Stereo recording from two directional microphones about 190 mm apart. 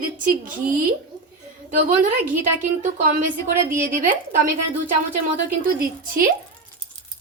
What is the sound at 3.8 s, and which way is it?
Speech, 45° right (ahead or behind).